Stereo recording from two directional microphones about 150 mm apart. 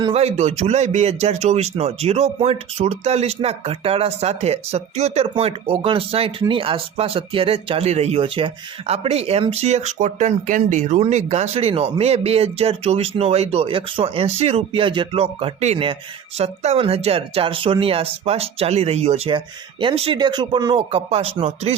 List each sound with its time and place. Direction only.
0.0 s a man's voice: 40° right (ahead or behind)